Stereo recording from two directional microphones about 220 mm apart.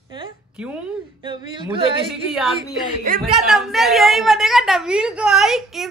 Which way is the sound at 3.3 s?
Centre (ahead or behind).